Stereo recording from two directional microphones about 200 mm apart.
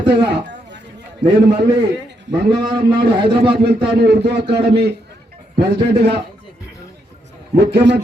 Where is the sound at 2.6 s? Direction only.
25° right (ahead or behind).